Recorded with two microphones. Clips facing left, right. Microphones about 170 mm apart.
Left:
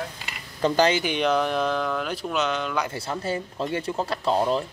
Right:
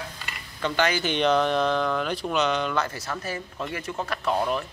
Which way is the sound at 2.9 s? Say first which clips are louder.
Left 4 dB; 30° left (ahead or behind).